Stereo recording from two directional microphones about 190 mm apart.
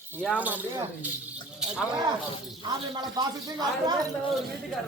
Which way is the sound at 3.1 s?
20° right (ahead or behind).